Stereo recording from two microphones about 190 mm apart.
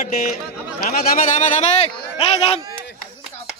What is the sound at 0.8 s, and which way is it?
Speech, 40° left (ahead or behind).